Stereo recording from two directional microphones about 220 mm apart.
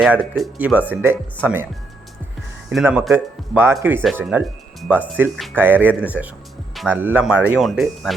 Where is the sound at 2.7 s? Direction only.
5° right (ahead or behind).